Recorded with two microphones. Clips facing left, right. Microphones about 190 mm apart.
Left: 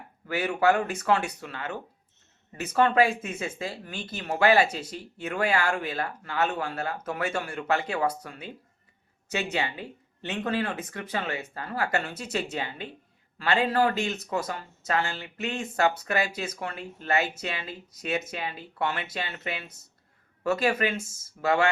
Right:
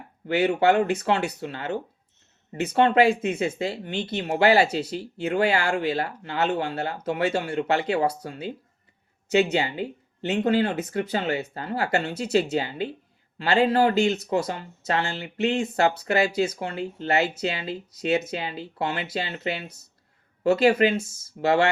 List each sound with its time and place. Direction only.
0.3 s speech: 30° right (ahead or behind)